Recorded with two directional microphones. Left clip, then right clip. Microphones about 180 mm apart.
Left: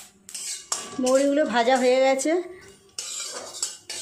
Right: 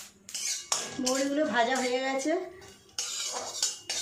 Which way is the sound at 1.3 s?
55° left (ahead or behind).